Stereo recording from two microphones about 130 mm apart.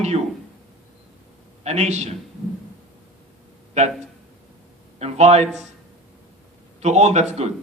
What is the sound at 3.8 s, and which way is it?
Speech, 60° right (ahead or behind).